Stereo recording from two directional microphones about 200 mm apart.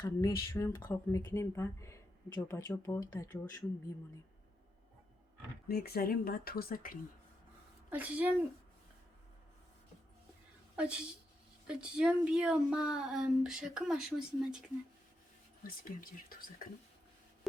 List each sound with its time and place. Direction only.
0.0 s speech: 20° left (ahead or behind)
5.6 s speech: 50° left (ahead or behind)
7.9 s a woman's voice: 10° right (ahead or behind)
10.8 s a woman's voice: 5° right (ahead or behind)
15.6 s speech: 45° left (ahead or behind)